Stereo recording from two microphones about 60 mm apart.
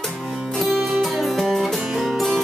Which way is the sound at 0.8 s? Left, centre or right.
Centre.